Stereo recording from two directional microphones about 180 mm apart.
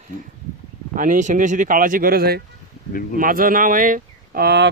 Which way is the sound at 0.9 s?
45° right (ahead or behind).